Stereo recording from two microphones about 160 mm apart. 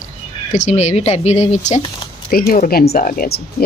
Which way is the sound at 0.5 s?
45° left (ahead or behind).